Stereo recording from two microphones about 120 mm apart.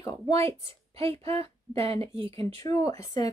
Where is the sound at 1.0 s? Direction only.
55° right (ahead or behind).